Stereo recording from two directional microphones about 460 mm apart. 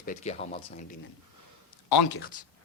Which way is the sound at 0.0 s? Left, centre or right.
Centre.